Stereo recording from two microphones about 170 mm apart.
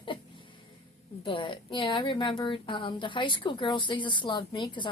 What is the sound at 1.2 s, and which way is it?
A woman's voice, 30° left (ahead or behind).